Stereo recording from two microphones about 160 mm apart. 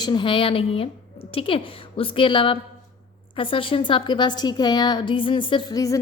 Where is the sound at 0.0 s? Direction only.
30° left (ahead or behind).